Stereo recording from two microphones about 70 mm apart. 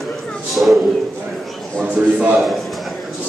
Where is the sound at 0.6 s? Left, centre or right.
Centre.